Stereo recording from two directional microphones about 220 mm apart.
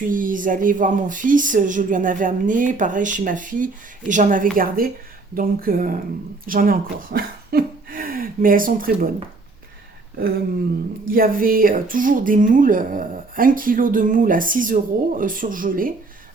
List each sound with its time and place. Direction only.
0.1 s speech: 40° right (ahead or behind)
11.1 s speech: 40° right (ahead or behind)